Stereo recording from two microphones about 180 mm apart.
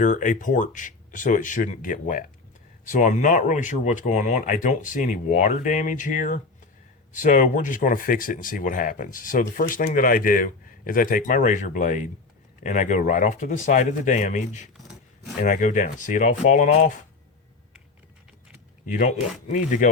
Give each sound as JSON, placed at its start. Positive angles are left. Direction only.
{"t": 0.0, "sound": "speech", "side_deg": 45}
{"t": 18.9, "sound": "speech", "side_deg": 45}